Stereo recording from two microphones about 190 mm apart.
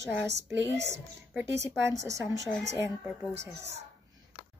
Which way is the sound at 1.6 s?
15° right (ahead or behind).